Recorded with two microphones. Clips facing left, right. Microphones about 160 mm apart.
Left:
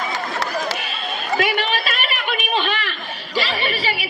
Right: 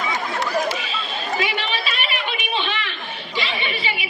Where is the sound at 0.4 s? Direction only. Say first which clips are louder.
Right 3 dB; 85° left.